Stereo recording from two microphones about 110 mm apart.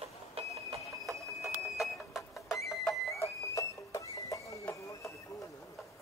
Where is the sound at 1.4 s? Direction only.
Centre (ahead or behind).